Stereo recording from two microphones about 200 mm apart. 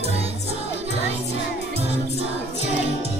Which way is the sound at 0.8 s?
30° right (ahead or behind).